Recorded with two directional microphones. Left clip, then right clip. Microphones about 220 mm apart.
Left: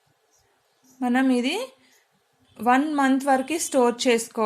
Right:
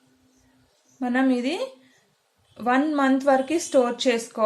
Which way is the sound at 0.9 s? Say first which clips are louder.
Left 1 dB; 35° left (ahead or behind).